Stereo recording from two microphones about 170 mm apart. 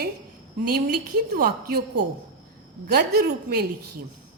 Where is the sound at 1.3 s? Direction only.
65° right (ahead or behind).